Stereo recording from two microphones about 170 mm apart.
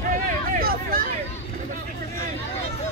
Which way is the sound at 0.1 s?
55° right (ahead or behind).